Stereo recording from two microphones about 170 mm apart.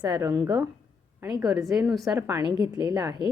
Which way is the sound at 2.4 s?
25° right (ahead or behind).